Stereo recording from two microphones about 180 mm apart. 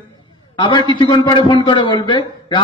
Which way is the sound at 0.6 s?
25° left (ahead or behind).